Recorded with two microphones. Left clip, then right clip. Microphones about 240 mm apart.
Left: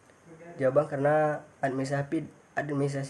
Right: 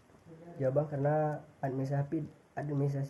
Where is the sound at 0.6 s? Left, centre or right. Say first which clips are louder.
Left 7 dB; left.